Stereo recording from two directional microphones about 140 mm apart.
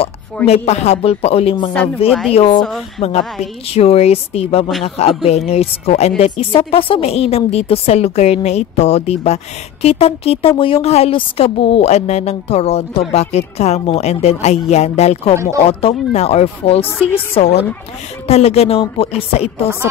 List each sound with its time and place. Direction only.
0.5 s a woman's voice: 50° left (ahead or behind)
3.7 s a woman's voice: 50° left (ahead or behind)